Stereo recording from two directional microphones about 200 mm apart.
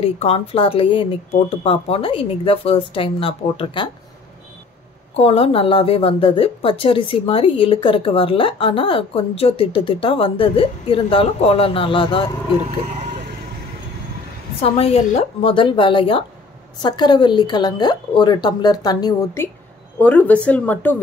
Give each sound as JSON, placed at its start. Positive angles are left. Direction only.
{"t": 0.0, "sound": "a woman's voice", "side_deg": 30}
{"t": 5.1, "sound": "a woman's voice", "side_deg": 30}
{"t": 15.4, "sound": "a woman's voice", "side_deg": 25}